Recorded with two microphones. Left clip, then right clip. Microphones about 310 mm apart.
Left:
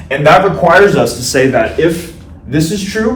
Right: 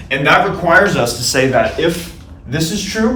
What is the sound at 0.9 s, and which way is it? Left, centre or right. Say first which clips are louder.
Speech: left 3 dB; centre.